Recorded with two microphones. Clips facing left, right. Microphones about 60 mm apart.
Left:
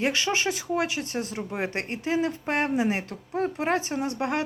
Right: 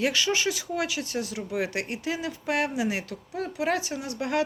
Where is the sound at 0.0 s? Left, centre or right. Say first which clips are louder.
Even; left.